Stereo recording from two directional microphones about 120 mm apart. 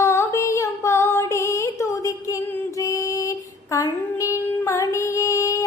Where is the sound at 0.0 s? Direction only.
25° left (ahead or behind).